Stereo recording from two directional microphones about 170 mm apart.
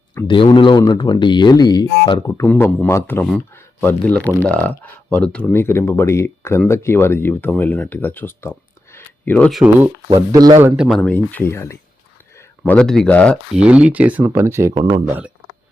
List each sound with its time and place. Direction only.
0.3 s speech: 30° left (ahead or behind)
2.4 s speech: 10° left (ahead or behind)
10.3 s a man's voice: 20° right (ahead or behind)
10.8 s speech: centre (ahead or behind)
12.6 s speech: 5° left (ahead or behind)
13.6 s speech: 5° right (ahead or behind)
14.7 s a man's voice: 30° right (ahead or behind)
15.0 s speech: 10° right (ahead or behind)